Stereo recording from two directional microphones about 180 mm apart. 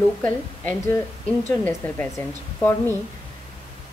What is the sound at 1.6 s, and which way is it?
A woman's voice, 10° left (ahead or behind).